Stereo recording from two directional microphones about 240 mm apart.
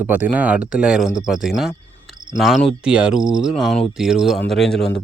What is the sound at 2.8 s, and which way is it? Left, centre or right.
Speech, centre.